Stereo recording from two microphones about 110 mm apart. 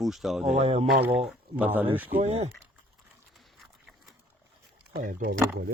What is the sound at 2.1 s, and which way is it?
Speech, 75° right (ahead or behind).